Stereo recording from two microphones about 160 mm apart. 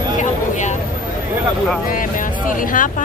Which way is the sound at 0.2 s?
50° left (ahead or behind).